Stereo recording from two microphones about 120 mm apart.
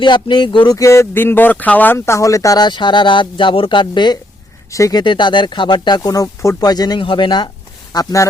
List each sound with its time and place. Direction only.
0.0 s speech: 40° left (ahead or behind)
0.8 s speech: 25° left (ahead or behind)
6.6 s speech: 35° left (ahead or behind)
7.9 s speech: 25° left (ahead or behind)